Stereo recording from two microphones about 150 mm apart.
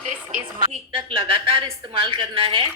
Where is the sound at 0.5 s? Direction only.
35° right (ahead or behind).